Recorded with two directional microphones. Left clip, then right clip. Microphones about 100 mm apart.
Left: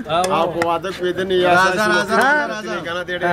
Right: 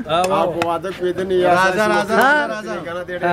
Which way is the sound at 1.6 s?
25° right (ahead or behind).